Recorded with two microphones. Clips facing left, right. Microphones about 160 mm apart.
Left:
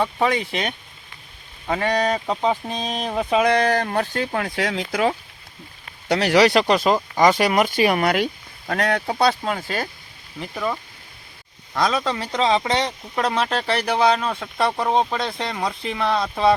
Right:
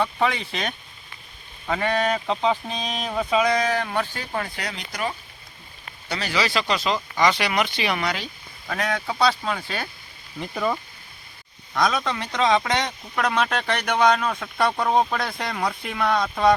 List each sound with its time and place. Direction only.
0.0 s speech: 15° left (ahead or behind)
2.7 s speech: 50° left (ahead or behind)
3.8 s speech: 45° left (ahead or behind); by 5.1 s 90° left
6.1 s speech: 80° left; by 9.0 s 55° left (ahead or behind)
9.4 s speech: 45° left (ahead or behind)
10.4 s speech: centre (ahead or behind)
11.8 s speech: 30° left (ahead or behind)
14.3 s speech: 5° left (ahead or behind)
14.8 s speech: 20° left (ahead or behind)
16.1 s speech: centre (ahead or behind)